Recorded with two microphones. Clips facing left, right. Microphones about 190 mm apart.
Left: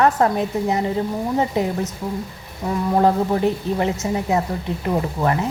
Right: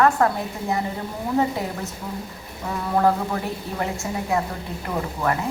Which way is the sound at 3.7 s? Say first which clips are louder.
Left 5 dB; 20° left (ahead or behind).